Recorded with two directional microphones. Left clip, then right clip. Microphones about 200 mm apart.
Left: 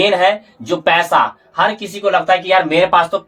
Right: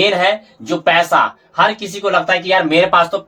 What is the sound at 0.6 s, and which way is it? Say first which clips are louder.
Speech: even; 30° left (ahead or behind).